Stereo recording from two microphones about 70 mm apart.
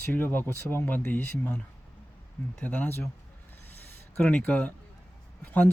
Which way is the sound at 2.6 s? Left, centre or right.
Left.